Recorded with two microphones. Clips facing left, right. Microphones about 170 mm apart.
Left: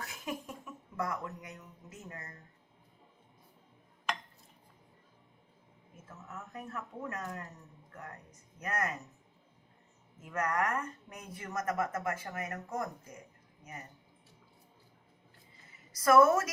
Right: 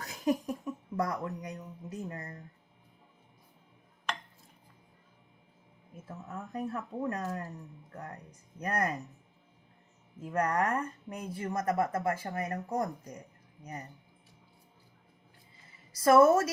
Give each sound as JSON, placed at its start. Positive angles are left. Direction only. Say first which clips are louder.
{"t": 0.0, "sound": "speech", "louder": "right 10 dB", "side_deg": -35}
{"t": 6.1, "sound": "speech", "louder": "right 6 dB", "side_deg": -35}
{"t": 10.2, "sound": "speech", "louder": "right 3 dB", "side_deg": -30}
{"t": 15.9, "sound": "a woman's voice", "louder": "right 2 dB", "side_deg": -30}